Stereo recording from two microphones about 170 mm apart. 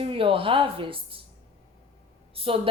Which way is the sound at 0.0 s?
30° right (ahead or behind).